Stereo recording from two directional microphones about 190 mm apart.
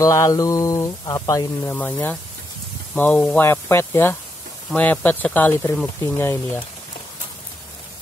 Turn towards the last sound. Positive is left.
turn(degrees=10)  # may be behind; listen again after turning